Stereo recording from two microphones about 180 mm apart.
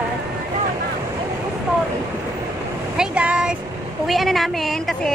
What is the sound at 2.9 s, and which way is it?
A woman's voice, 5° right (ahead or behind).